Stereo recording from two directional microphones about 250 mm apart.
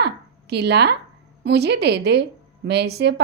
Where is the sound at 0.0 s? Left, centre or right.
Right.